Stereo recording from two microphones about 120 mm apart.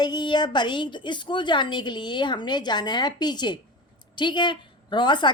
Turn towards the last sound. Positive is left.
turn(degrees=40)  # may be behind; listen again after turning